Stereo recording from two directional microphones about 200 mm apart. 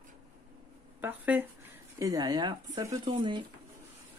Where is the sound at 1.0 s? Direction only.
10° right (ahead or behind).